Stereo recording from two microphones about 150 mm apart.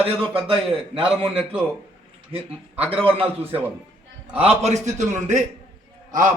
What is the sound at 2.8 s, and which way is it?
Speech, 40° right (ahead or behind).